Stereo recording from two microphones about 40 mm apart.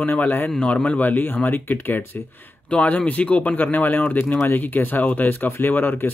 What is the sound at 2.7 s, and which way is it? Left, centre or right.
Speech, left.